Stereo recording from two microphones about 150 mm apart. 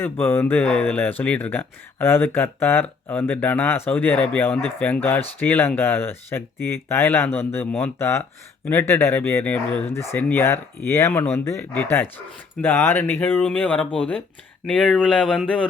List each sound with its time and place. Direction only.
0.0 s speech: 15° left (ahead or behind)